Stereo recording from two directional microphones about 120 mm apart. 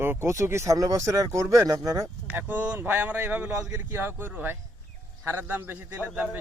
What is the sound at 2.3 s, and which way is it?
A man's voice, 15° right (ahead or behind).